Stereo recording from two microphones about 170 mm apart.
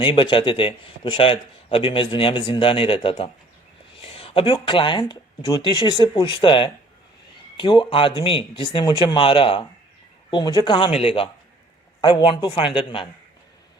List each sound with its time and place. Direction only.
0.0 s a man's voice: 30° left (ahead or behind)